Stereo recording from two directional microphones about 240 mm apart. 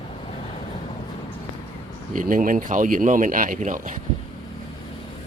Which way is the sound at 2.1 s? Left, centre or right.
Right.